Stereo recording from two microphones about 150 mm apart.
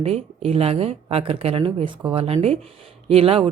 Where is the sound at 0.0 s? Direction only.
45° right (ahead or behind).